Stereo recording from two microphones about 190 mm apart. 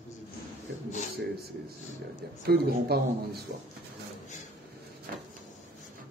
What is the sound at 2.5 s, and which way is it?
Speech, 55° right (ahead or behind).